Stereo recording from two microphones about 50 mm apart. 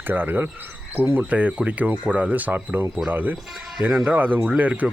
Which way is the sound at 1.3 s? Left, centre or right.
Right.